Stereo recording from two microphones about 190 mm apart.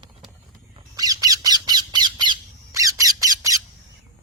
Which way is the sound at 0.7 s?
20° right (ahead or behind).